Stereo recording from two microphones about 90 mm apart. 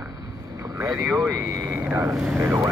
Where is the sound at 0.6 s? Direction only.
40° right (ahead or behind).